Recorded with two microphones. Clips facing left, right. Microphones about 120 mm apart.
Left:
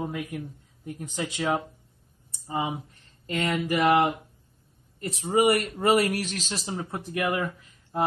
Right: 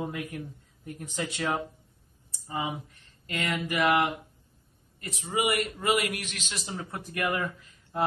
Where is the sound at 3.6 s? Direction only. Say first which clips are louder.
Left 3 dB; 40° left (ahead or behind).